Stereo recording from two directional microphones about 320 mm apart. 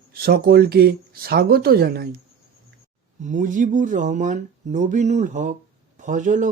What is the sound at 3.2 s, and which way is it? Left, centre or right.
Speech, right.